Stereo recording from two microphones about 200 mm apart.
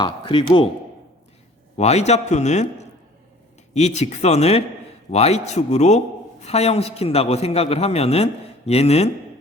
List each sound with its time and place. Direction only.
0.0 s speech: 25° left (ahead or behind)
1.8 s a man's voice: 35° left (ahead or behind)